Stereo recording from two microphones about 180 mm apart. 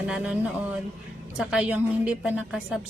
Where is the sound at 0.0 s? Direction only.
5° right (ahead or behind).